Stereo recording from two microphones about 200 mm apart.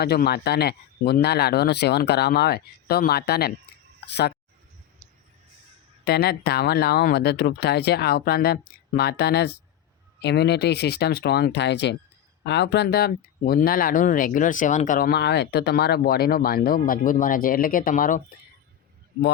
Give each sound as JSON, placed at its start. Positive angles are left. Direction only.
{"t": 0.0, "sound": "speech", "side_deg": 50}
{"t": 4.0, "sound": "a sound", "side_deg": 55}
{"t": 6.1, "sound": "speech", "side_deg": 50}